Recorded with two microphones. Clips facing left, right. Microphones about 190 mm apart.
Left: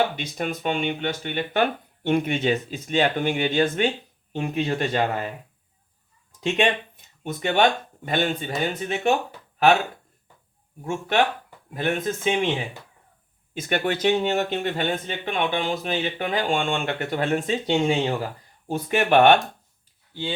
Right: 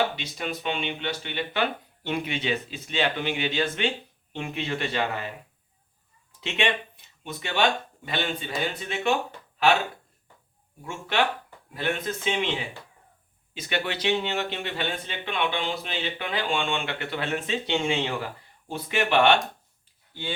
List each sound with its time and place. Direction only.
0.2 s speech: 50° left (ahead or behind)
6.4 s speech: 45° left (ahead or behind)
10.8 s speech: 45° left (ahead or behind)
13.5 s speech: 50° left (ahead or behind)